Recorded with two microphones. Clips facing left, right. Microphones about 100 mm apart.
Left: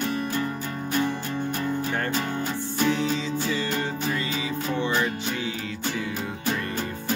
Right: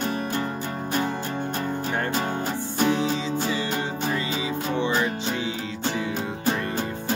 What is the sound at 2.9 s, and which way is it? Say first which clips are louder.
Music: right 1 dB; 20° right (ahead or behind).